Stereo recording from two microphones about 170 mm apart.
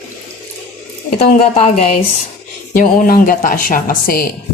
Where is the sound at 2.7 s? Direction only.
55° left (ahead or behind).